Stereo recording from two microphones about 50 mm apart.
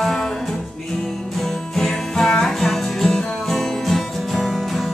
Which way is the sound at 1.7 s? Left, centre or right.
Centre.